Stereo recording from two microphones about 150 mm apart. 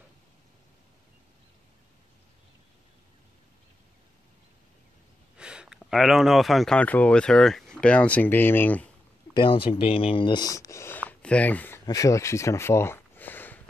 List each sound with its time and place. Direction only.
5.4 s a sound: 5° right (ahead or behind)
5.8 s speech: centre (ahead or behind)
9.3 s speech: 35° left (ahead or behind); by 11.8 s 10° left (ahead or behind)
11.8 s speech: 20° left (ahead or behind)